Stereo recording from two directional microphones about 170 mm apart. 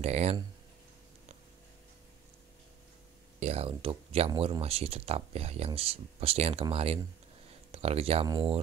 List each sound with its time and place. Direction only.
0.0 s speech: 40° right (ahead or behind)
3.3 s speech: 40° right (ahead or behind)